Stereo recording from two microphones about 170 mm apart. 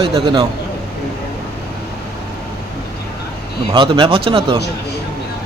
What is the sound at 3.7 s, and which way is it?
Speech, 30° right (ahead or behind).